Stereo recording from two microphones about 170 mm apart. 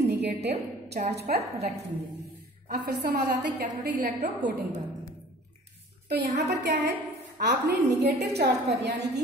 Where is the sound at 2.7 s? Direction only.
80° right.